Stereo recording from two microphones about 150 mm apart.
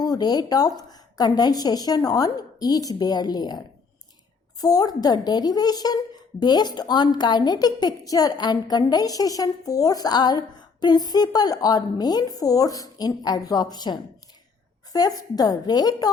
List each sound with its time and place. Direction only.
0.0 s a woman's voice: 25° left (ahead or behind)
4.6 s a woman's voice: 25° left (ahead or behind)